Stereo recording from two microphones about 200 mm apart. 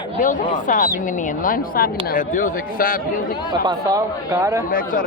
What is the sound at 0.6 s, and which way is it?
Speech, 40° left (ahead or behind).